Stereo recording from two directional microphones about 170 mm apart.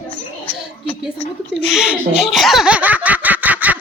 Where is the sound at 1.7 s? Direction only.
5° right (ahead or behind).